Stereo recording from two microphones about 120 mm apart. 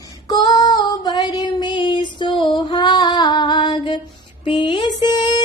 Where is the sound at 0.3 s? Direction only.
35° left (ahead or behind).